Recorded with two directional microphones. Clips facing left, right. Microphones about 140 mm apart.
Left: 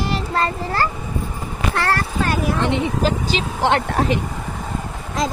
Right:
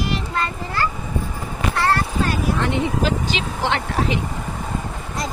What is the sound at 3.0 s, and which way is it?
Speech, 40° left (ahead or behind).